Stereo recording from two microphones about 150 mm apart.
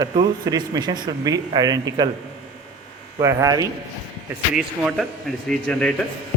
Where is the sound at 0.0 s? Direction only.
25° right (ahead or behind).